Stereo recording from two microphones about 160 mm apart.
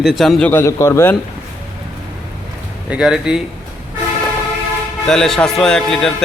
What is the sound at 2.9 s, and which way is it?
Speech, 5° right (ahead or behind).